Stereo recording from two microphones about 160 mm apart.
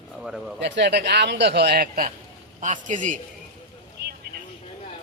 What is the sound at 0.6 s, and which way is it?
A man's voice, 90° right.